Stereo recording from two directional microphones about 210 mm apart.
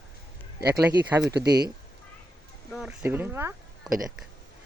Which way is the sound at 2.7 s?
5° right (ahead or behind).